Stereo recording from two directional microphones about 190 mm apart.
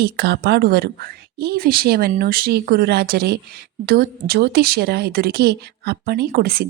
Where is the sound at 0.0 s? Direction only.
55° right (ahead or behind).